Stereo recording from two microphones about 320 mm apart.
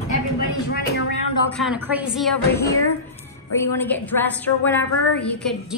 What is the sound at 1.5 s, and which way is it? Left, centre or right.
Speech, centre.